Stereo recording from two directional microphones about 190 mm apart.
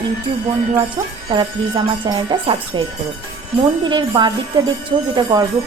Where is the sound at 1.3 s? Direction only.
25° right (ahead or behind).